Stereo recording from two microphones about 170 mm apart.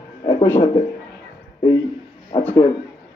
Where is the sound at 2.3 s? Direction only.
30° left (ahead or behind).